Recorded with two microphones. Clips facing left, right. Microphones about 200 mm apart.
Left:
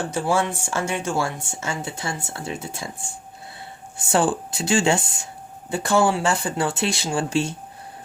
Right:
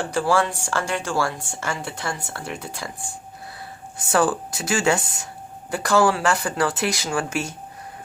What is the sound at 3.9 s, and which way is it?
Speech, 25° left (ahead or behind).